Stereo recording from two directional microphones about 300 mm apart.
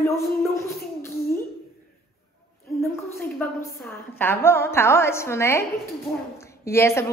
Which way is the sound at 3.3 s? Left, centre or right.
Centre.